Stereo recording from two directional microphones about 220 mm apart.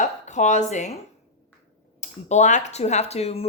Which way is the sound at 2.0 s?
35° left (ahead or behind).